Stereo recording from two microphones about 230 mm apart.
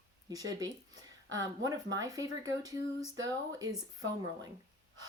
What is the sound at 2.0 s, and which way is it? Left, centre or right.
Speech, centre.